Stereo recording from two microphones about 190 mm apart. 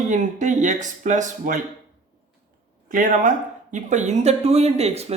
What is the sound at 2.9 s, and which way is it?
Speech, 45° right (ahead or behind).